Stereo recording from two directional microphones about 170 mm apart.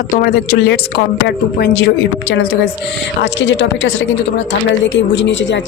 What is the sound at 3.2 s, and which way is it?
Speech, 90° left.